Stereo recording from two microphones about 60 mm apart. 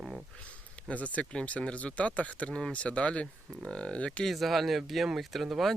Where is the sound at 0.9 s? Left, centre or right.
Left.